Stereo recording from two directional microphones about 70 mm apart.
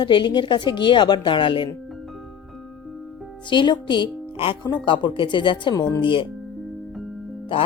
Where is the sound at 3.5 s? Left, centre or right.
Left.